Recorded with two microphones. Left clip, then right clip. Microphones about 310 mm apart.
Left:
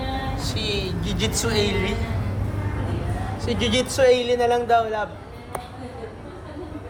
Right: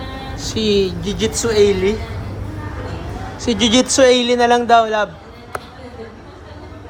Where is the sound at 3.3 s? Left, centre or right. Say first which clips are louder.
Right 8 dB; right.